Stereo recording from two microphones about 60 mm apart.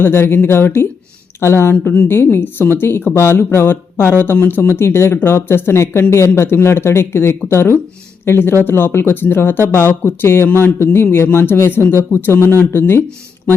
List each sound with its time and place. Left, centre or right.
0.0 s speech: left